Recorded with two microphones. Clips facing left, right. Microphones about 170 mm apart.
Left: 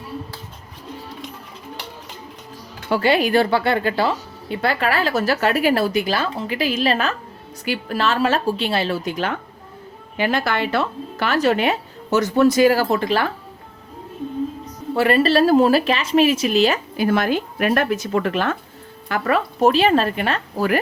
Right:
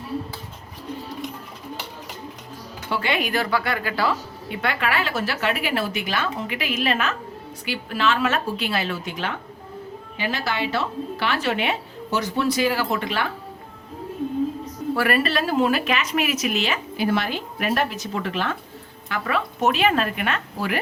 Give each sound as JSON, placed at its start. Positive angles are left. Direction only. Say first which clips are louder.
{"t": 2.9, "sound": "a woman's voice", "louder": "left 7 dB", "side_deg": 35}
{"t": 10.2, "sound": "speech", "louder": "left 6 dB", "side_deg": 55}
{"t": 14.9, "sound": "a woman's voice", "louder": "left 7 dB", "side_deg": 25}